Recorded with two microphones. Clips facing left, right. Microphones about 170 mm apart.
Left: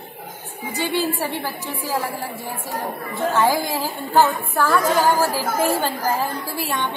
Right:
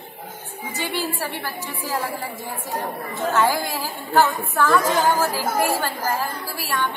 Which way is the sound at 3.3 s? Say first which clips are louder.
Left 1 dB; 15° left (ahead or behind).